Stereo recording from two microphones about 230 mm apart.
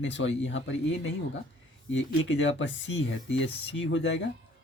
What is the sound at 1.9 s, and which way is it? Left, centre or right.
Speech, left.